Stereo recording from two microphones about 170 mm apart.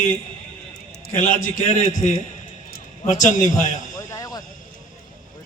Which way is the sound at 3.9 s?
20° left (ahead or behind).